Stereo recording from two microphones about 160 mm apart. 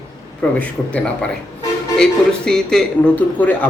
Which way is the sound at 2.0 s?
5° left (ahead or behind).